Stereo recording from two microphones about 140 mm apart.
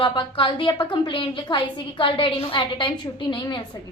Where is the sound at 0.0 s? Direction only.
35° left (ahead or behind).